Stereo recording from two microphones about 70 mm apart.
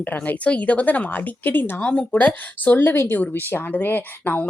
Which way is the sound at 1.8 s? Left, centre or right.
Centre.